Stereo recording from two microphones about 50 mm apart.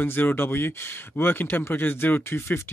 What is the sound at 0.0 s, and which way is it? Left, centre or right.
Speech, left.